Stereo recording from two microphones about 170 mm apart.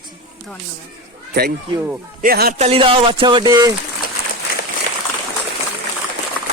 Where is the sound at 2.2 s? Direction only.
60° right (ahead or behind).